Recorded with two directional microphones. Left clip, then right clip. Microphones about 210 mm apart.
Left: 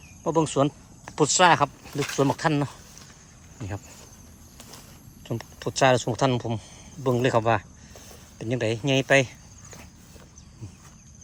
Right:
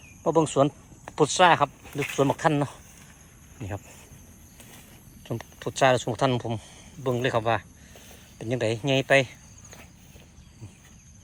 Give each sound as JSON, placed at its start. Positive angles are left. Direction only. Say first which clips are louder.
{"t": 0.3, "sound": "speech", "louder": "right 1 dB", "side_deg": 10}
{"t": 5.2, "sound": "speech", "louder": "left 1 dB", "side_deg": 10}
{"t": 8.4, "sound": "speech", "louder": "even", "side_deg": 10}